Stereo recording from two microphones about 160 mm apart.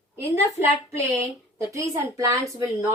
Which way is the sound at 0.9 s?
20° right (ahead or behind).